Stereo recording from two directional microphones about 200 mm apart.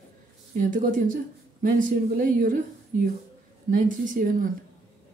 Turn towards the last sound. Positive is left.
turn(degrees=-45)  # may be behind; listen again after turning